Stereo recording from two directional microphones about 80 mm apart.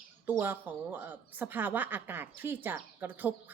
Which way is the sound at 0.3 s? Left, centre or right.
Right.